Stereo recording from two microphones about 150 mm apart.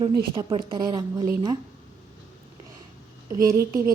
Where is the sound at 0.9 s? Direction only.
25° right (ahead or behind).